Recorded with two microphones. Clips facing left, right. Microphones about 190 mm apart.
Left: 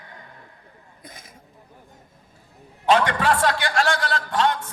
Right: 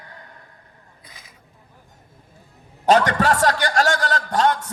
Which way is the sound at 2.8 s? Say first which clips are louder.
Right 2 dB; 40° right (ahead or behind).